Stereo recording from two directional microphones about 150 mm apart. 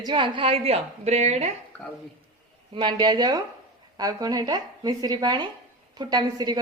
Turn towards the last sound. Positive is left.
turn(degrees=-25)  # may be behind; listen again after turning